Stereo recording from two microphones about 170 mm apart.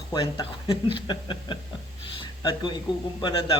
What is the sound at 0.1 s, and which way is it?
Speech, 25° left (ahead or behind).